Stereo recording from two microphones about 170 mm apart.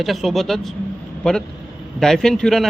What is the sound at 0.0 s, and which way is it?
A man's voice, centre (ahead or behind).